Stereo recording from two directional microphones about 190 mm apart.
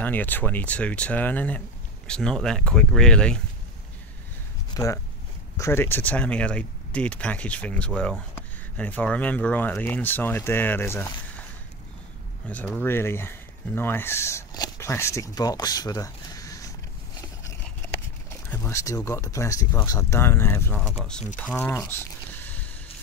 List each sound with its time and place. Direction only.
0.0 s speech: 10° left (ahead or behind)
4.7 s speech: 15° left (ahead or behind)
12.4 s speech: 5° left (ahead or behind)
17.4 s a sound: 15° left (ahead or behind)
18.5 s speech: 15° left (ahead or behind)